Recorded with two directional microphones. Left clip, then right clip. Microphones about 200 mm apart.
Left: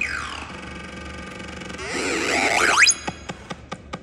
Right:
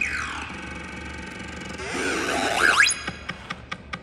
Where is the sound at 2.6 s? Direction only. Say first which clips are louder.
Right 1 dB; 20° left (ahead or behind).